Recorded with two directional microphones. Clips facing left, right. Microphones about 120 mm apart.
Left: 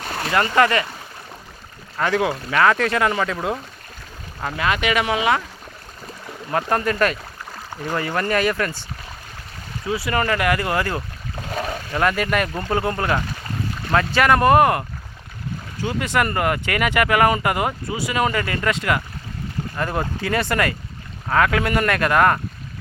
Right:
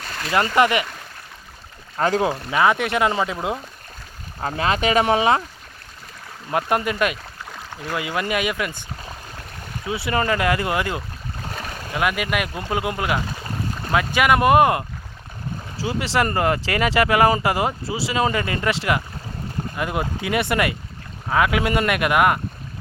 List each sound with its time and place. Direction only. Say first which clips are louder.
0.1 s a sound: left 3 dB; 30° left (ahead or behind)
0.3 s speech: even; 15° right (ahead or behind)
2.0 s speech: right 1 dB; 35° right (ahead or behind)
2.5 s speech: left 2 dB; 15° right (ahead or behind)
4.4 s speech: right 1 dB; 30° right (ahead or behind)
6.5 s speech: even; 15° right (ahead or behind)
9.8 s speech: left 1 dB; 25° right (ahead or behind)
19.7 s speech: left 1 dB; 10° right (ahead or behind)